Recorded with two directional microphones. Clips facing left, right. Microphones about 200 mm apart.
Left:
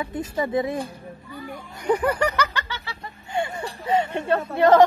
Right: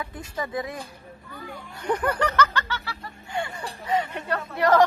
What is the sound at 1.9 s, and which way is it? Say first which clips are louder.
Speech: left 3 dB; 10° left (ahead or behind).